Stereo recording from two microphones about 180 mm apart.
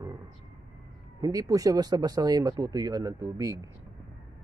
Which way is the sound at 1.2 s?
20° right (ahead or behind).